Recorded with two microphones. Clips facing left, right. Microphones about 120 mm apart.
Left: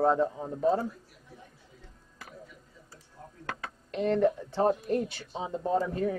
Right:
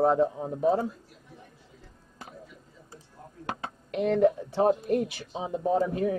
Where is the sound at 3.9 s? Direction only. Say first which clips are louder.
Right 3 dB; 10° right (ahead or behind).